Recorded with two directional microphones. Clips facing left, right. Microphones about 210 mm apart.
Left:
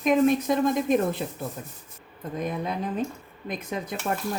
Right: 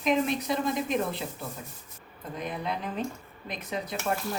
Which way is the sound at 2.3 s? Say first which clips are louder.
Left 4 dB; 45° left (ahead or behind).